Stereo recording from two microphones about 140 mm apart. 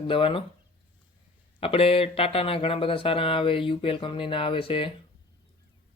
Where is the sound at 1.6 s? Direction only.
40° left (ahead or behind).